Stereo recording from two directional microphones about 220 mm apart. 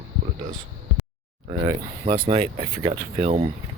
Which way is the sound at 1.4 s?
25° right (ahead or behind).